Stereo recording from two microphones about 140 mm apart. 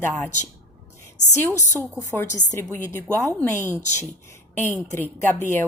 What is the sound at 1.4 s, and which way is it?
A woman's voice, 15° left (ahead or behind).